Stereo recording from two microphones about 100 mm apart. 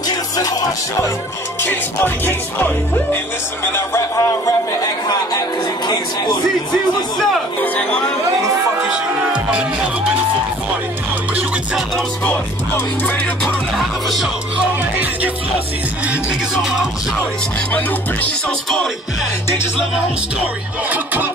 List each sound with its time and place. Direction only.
0.4 s music: 40° left (ahead or behind)
1.6 s music: 20° left (ahead or behind)
5.9 s speech: 45° left (ahead or behind)
7.6 s speech: 15° left (ahead or behind)
8.8 s music: 10° right (ahead or behind)
13.7 s music: centre (ahead or behind)
20.9 s music: 20° right (ahead or behind)